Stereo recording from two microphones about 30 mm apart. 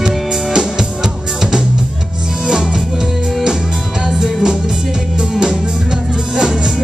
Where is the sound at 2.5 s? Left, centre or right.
Centre.